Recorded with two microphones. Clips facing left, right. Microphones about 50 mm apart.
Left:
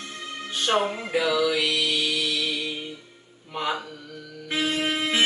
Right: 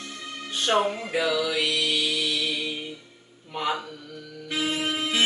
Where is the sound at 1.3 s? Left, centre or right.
Centre.